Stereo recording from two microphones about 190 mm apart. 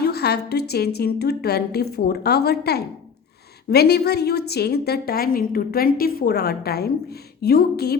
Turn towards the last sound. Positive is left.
turn(degrees=55)  # may be behind; listen again after turning